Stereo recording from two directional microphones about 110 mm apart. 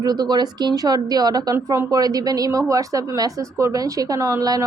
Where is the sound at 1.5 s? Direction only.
20° right (ahead or behind).